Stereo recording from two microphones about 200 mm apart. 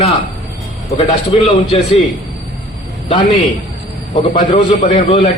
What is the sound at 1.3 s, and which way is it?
Speech, 30° left (ahead or behind).